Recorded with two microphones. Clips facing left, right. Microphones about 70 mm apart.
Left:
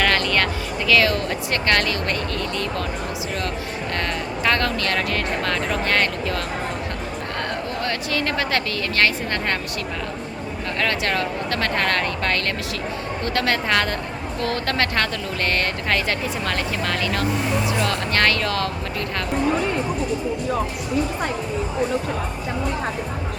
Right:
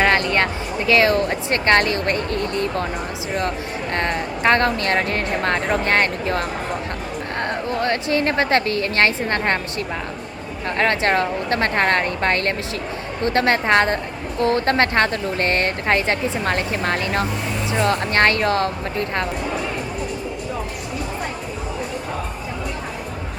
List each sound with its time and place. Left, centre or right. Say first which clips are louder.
0.0 s music: right 3 dB; right
0.9 s speech: right 3 dB; right
3.9 s speech: right 4 dB; right
7.8 s speech: right 6 dB; right
10.8 s a woman's voice: right 5 dB; right